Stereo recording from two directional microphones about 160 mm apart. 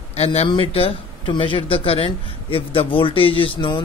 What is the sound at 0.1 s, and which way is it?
Speech, 40° left (ahead or behind).